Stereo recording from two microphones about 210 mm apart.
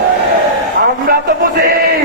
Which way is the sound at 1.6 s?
45° right (ahead or behind).